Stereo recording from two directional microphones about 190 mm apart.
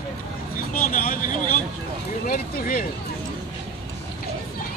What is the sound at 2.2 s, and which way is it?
Speech, 50° left (ahead or behind).